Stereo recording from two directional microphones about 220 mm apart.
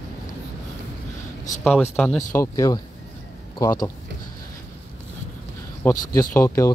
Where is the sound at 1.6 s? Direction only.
5° left (ahead or behind).